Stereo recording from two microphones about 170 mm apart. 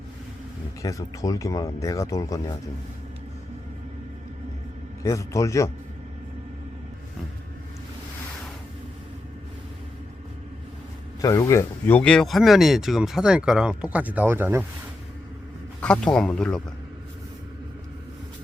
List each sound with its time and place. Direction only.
0.8 s speech: 20° left (ahead or behind)
5.0 s a man's voice: 20° left (ahead or behind)
11.2 s speech: 20° left (ahead or behind); by 14.6 s 15° right (ahead or behind)
15.8 s speech: 5° left (ahead or behind)